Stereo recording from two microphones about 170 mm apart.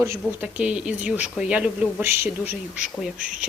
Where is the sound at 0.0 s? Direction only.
15° right (ahead or behind).